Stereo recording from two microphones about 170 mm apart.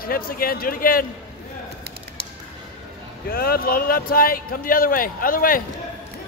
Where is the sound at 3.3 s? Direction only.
65° left (ahead or behind).